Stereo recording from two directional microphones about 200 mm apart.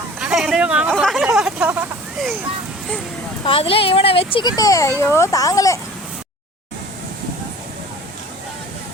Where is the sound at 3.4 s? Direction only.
25° left (ahead or behind).